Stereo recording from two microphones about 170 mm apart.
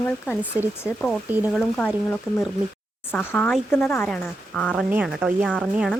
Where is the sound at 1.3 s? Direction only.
10° right (ahead or behind).